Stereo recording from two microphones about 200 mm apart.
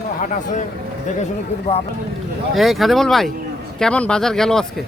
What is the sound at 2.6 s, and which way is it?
Speech, centre (ahead or behind).